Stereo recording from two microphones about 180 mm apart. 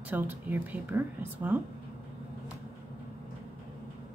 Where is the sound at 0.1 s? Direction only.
10° right (ahead or behind).